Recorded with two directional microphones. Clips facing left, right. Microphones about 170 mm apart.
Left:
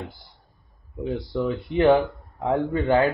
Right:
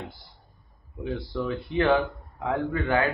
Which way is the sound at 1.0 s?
20° left (ahead or behind).